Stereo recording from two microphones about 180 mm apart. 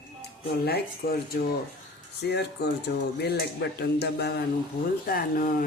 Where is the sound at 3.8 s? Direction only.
65° left (ahead or behind).